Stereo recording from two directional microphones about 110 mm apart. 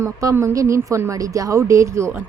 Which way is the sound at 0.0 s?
25° right (ahead or behind).